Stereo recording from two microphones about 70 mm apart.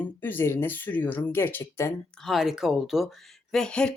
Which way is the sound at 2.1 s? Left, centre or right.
Centre.